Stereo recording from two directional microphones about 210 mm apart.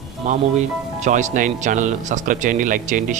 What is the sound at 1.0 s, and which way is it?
Speech, 35° right (ahead or behind).